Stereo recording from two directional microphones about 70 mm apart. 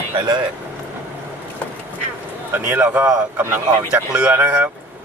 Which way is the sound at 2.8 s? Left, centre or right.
Right.